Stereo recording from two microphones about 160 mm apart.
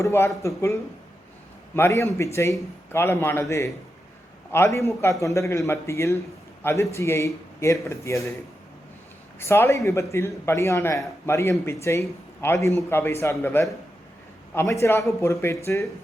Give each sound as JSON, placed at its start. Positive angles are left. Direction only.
{"t": 0.0, "sound": "a man's voice", "side_deg": 20}
{"t": 4.5, "sound": "a man's voice", "side_deg": 15}
{"t": 9.4, "sound": "a man's voice", "side_deg": 15}